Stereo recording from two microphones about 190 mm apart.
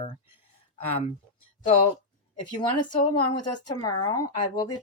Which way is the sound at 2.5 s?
25° left (ahead or behind).